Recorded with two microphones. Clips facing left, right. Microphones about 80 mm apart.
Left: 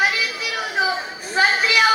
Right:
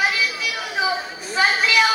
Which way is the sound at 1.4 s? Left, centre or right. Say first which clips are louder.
Left 1 dB; left.